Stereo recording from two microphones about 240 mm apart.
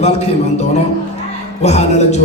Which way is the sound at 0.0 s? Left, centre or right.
Left.